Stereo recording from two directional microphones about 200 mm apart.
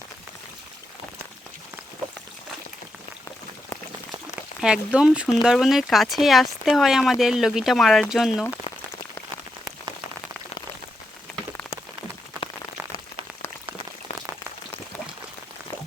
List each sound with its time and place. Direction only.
4.4 s speech: 5° right (ahead or behind)
12.4 s rain on surface: 25° right (ahead or behind)